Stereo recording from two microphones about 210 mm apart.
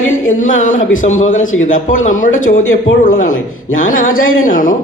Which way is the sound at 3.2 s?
75° left (ahead or behind).